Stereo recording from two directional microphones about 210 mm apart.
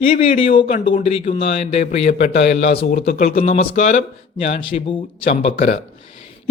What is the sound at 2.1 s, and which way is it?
Speech, 50° left (ahead or behind).